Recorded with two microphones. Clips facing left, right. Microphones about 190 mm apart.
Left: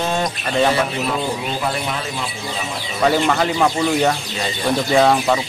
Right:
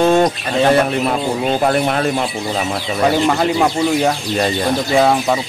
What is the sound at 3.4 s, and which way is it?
Speech, 10° right (ahead or behind).